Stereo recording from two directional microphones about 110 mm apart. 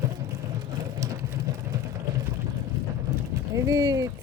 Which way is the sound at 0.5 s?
30° right (ahead or behind).